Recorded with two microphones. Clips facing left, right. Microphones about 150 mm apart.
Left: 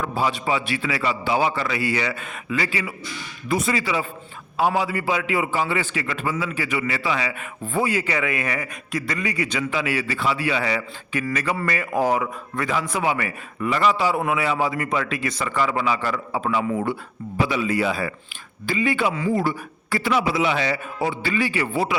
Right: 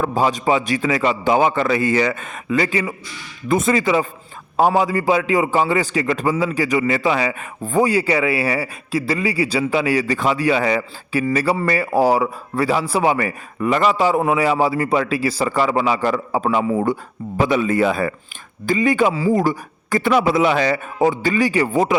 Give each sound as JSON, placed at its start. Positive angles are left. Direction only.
{"t": 0.0, "sound": "a man's voice", "side_deg": -40}